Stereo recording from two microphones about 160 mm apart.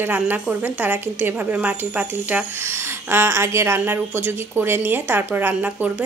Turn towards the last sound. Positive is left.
turn(degrees=-10)  # may be behind; listen again after turning